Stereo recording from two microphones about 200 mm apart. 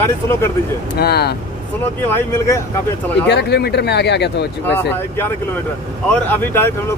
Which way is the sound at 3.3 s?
55° left (ahead or behind).